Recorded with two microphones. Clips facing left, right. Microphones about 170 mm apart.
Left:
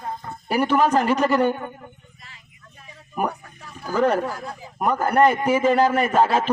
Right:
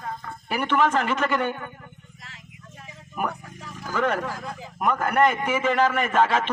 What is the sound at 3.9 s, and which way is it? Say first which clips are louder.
A man's voice: left 5 dB; 35° left (ahead or behind).